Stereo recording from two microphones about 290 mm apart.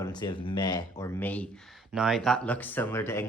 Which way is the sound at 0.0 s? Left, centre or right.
Centre.